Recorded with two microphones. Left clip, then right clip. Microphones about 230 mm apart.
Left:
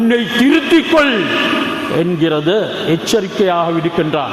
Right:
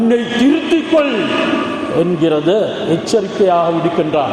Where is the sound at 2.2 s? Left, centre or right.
Left.